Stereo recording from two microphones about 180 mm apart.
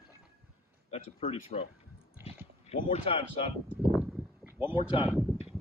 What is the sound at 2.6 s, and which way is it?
Speech, 30° left (ahead or behind).